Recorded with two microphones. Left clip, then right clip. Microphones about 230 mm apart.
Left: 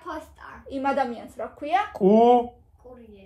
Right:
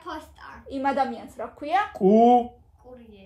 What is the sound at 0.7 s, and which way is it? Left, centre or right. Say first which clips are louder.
A woman's voice: even; right.